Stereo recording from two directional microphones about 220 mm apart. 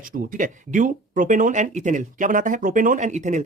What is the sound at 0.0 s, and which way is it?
Speech, 40° right (ahead or behind).